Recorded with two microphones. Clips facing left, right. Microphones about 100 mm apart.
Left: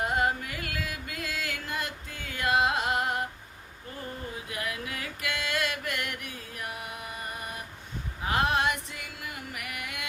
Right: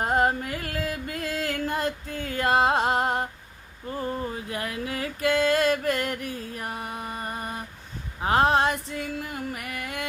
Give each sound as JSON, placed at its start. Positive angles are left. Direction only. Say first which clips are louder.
{"t": 0.0, "sound": "music", "louder": "right 5 dB", "side_deg": -40}
{"t": 4.4, "sound": "mantra", "louder": "right 4 dB", "side_deg": -35}
{"t": 8.2, "sound": "female singing", "louder": "right 6 dB", "side_deg": -35}